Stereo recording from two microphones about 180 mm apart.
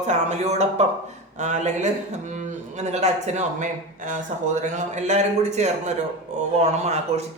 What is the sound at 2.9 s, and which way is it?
Speech, 40° right (ahead or behind).